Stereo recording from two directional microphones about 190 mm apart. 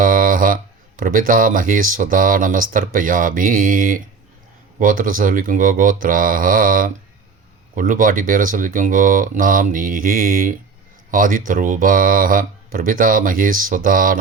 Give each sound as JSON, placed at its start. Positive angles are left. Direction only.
{"t": 0.0, "sound": "speech", "side_deg": -45}